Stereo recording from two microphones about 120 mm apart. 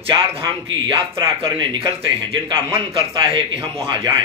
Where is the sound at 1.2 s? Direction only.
45° right (ahead or behind).